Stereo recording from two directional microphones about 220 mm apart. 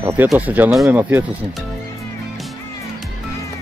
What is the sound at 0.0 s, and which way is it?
Speech, 10° right (ahead or behind).